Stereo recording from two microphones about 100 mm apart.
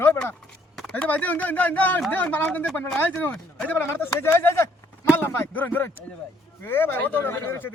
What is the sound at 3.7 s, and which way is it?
A man's voice, 20° left (ahead or behind).